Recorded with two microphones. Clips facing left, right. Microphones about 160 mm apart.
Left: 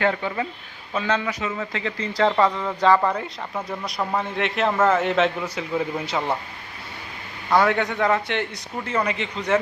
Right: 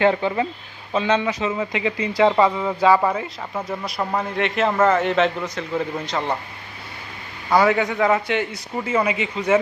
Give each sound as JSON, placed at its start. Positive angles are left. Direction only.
{"t": 0.0, "sound": "a man's voice", "side_deg": -25}
{"t": 7.5, "sound": "a man's voice", "side_deg": 0}